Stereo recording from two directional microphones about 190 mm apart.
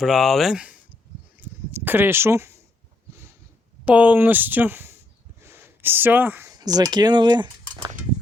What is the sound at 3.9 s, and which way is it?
Speech, 10° right (ahead or behind).